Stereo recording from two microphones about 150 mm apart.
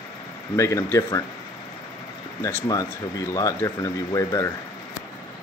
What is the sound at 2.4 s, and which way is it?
Speech, 20° left (ahead or behind).